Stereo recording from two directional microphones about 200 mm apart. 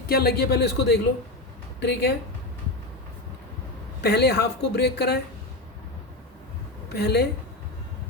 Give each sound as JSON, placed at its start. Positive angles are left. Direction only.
{"t": 0.1, "sound": "speech", "side_deg": 50}
{"t": 4.0, "sound": "speech", "side_deg": 55}
{"t": 6.9, "sound": "speech", "side_deg": 55}